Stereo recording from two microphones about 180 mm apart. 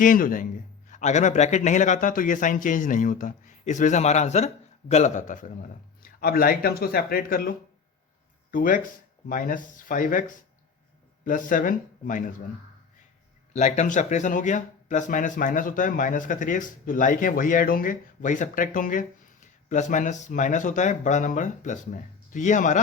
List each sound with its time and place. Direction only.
0.0 s speech: 50° left (ahead or behind)
6.1 s speech: 55° left (ahead or behind)
11.3 s speech: 45° left (ahead or behind)
13.5 s speech: 40° left (ahead or behind)